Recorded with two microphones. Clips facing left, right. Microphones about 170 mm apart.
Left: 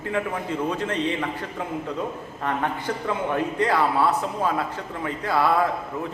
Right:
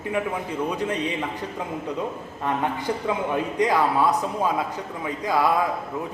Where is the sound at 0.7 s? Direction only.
15° right (ahead or behind).